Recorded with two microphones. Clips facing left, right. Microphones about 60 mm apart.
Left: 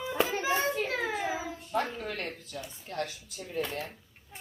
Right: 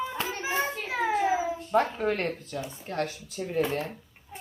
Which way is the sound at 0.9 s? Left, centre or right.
Centre.